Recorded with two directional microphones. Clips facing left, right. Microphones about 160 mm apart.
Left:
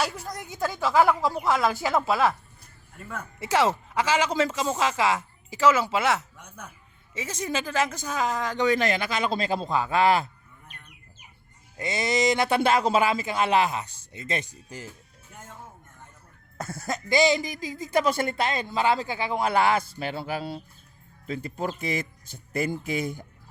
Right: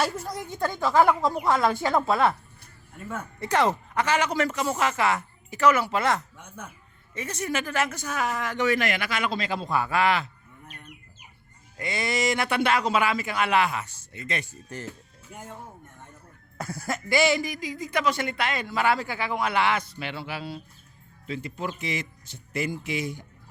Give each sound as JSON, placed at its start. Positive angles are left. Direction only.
{"t": 0.0, "sound": "a woman's voice", "side_deg": 0}
{"t": 7.1, "sound": "speech", "side_deg": 10}
{"t": 9.3, "sound": "a sound", "side_deg": 35}
{"t": 9.6, "sound": "speech", "side_deg": 20}
{"t": 10.0, "sound": "a sound", "side_deg": 35}
{"t": 11.8, "sound": "speech", "side_deg": 25}
{"t": 14.5, "sound": "speech", "side_deg": 10}
{"t": 15.3, "sound": "speech", "side_deg": -15}
{"t": 16.6, "sound": "speech", "side_deg": 25}
{"t": 18.0, "sound": "speech", "side_deg": 40}
{"t": 20.0, "sound": "a sound", "side_deg": 40}
{"t": 21.2, "sound": "speech", "side_deg": 45}